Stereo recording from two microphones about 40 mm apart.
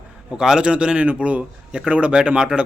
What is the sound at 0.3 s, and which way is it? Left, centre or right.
A man's voice, centre.